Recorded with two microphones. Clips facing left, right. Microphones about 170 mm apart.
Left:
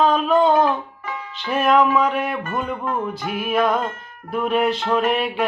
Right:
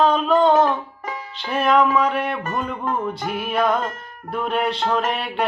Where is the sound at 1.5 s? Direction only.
Centre (ahead or behind).